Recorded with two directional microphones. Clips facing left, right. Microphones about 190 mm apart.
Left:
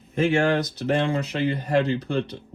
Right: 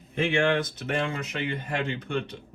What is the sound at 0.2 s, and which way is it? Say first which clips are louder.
Speech: left 3 dB; 40° left (ahead or behind).